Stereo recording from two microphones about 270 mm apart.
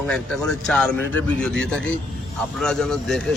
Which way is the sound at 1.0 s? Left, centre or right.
Right.